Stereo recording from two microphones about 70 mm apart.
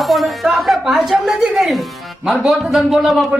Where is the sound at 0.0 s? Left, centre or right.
Centre.